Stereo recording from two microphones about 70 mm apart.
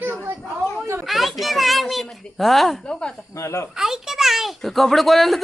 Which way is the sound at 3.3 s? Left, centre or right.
Left.